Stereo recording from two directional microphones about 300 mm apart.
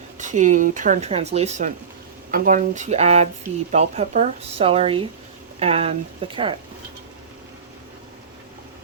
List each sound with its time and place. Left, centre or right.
0.2 s speech: right